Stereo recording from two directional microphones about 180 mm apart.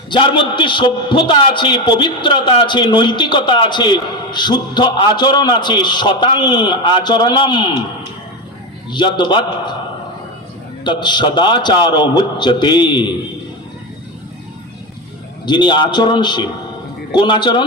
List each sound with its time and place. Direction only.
0.1 s a man's voice: 25° left (ahead or behind)
8.9 s a man's voice: 25° left (ahead or behind)
10.8 s a man's voice: 25° left (ahead or behind)
15.4 s a man's voice: 25° left (ahead or behind)